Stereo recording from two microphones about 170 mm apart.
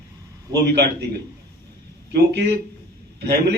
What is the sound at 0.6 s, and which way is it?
Speech, 75° right (ahead or behind).